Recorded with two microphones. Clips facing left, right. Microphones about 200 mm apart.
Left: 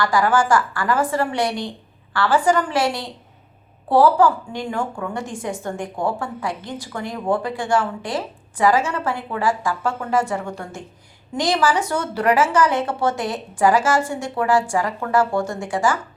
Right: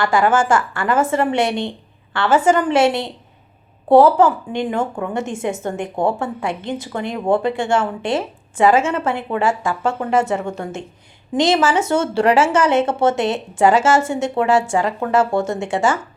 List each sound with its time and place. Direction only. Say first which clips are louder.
0.0 s a woman's voice: right 2 dB; 25° right (ahead or behind)